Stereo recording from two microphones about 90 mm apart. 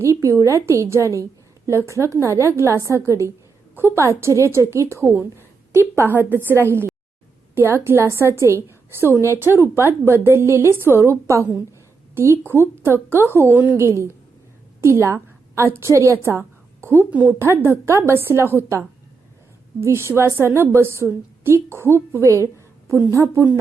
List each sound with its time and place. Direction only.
0.0 s a woman's voice: 35° right (ahead or behind)
17.1 s a woman's voice: 15° right (ahead or behind)
17.4 s a woman's voice: 25° right (ahead or behind)